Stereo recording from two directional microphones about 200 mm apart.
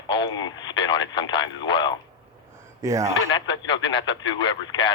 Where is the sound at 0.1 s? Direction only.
20° left (ahead or behind).